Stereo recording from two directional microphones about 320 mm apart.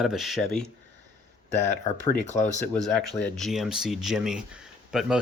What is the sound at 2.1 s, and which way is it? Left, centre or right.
Speech, left.